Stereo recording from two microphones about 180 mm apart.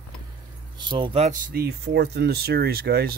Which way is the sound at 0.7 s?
25° right (ahead or behind).